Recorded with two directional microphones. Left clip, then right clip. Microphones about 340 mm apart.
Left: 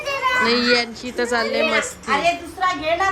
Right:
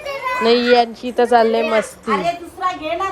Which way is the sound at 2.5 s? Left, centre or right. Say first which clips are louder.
Left 1 dB; left.